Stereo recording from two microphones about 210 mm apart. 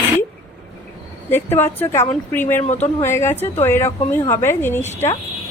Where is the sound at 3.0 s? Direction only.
10° left (ahead or behind).